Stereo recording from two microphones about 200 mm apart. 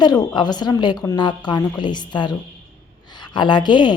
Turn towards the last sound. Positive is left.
turn(degrees=20)  # may be behind; listen again after turning